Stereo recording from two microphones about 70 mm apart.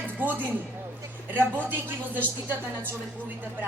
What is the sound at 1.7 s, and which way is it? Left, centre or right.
Speech, right.